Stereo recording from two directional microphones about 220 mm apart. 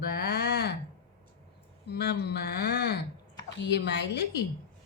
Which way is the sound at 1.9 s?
50° left (ahead or behind).